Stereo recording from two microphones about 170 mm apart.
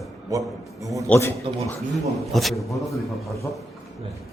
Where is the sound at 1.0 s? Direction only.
15° left (ahead or behind).